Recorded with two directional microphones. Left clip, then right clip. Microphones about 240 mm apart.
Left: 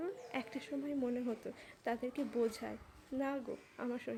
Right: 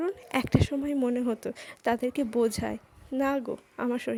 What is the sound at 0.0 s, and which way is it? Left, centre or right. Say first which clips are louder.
A woman's voice: right 12 dB; right.